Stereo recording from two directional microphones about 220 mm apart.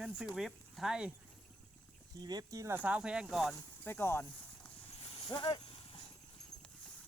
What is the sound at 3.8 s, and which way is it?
Speech, 10° left (ahead or behind).